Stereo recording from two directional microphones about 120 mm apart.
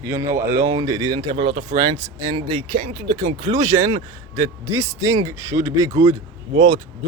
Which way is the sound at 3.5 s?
25° right (ahead or behind).